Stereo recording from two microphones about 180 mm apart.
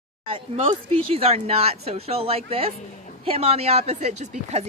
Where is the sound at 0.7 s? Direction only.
35° right (ahead or behind).